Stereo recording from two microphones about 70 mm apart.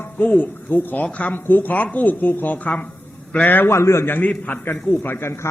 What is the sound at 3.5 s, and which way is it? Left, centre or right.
Speech, left.